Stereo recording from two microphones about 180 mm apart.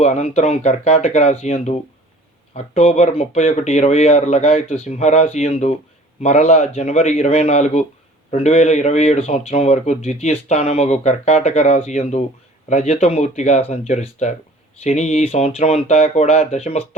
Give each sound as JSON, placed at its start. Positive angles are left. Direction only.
{"t": 0.0, "sound": "speech", "side_deg": 40}